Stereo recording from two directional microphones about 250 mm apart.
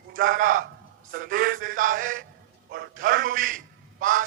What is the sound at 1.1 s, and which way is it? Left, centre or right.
Speech, right.